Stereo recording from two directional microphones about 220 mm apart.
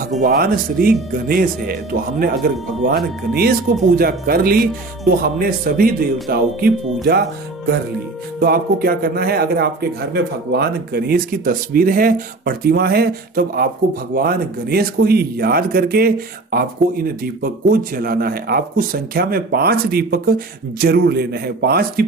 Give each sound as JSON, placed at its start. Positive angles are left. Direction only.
{"t": 0.2, "sound": "a man's voice", "side_deg": -40}
{"t": 8.4, "sound": "a man's voice", "side_deg": -45}
{"t": 17.2, "sound": "a man's voice", "side_deg": -40}